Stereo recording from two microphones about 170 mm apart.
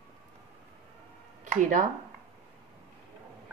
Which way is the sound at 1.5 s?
50° right (ahead or behind).